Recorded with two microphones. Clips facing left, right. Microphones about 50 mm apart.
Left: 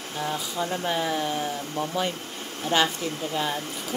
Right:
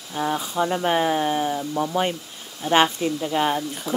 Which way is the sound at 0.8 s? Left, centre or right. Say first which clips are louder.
Right 5 dB; right.